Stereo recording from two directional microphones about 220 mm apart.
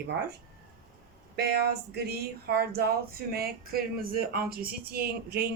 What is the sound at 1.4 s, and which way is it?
Speech, 50° right (ahead or behind).